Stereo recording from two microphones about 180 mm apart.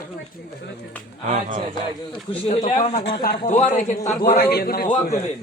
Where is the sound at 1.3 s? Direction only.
40° right (ahead or behind).